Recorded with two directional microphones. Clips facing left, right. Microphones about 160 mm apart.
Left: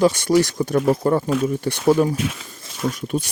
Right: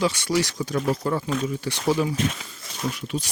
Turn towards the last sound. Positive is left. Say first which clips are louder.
# left 5 dB
turn(degrees=50)  # may be behind; listen again after turning